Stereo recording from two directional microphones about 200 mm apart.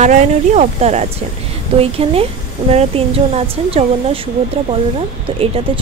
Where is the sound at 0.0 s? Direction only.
35° right (ahead or behind).